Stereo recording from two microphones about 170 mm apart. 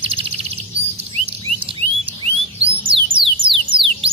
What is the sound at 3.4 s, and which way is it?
Music, 30° right (ahead or behind).